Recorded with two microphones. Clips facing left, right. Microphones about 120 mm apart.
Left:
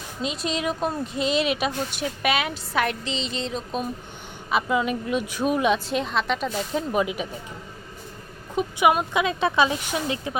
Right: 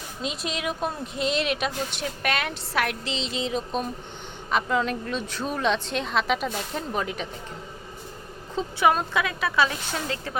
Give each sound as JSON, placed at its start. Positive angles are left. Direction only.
{"t": 0.2, "sound": "a woman's voice", "side_deg": 0}
{"t": 6.9, "sound": "a woman's voice", "side_deg": 10}
{"t": 8.5, "sound": "a woman's voice", "side_deg": 15}